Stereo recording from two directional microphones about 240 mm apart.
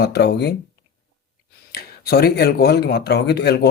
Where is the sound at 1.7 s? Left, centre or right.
Left.